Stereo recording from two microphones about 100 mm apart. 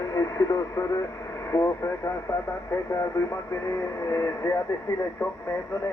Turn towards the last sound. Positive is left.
turn(degrees=25)  # may be behind; listen again after turning